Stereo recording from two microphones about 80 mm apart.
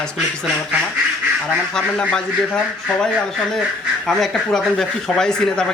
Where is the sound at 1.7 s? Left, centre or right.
Centre.